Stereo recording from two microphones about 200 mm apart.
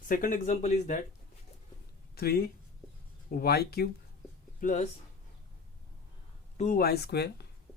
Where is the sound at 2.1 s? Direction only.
50° left (ahead or behind).